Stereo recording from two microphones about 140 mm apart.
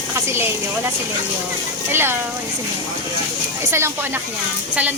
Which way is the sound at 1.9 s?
15° right (ahead or behind).